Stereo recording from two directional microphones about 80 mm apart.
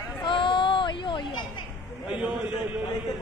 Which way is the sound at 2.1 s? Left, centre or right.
Centre.